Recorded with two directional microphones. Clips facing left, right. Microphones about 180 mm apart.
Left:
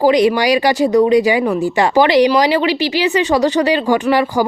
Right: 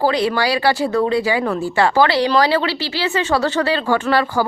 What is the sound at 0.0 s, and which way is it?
Speech, 15° left (ahead or behind).